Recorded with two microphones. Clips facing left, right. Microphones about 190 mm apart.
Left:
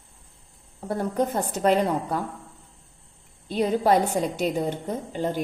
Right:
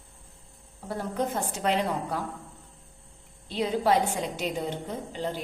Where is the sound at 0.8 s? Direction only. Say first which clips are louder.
Left 5 dB; 45° left (ahead or behind).